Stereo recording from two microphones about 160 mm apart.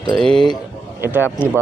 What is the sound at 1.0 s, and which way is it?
Speech, 10° right (ahead or behind).